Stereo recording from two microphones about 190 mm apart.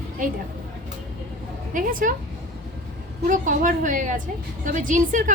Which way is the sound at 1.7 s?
45° right (ahead or behind).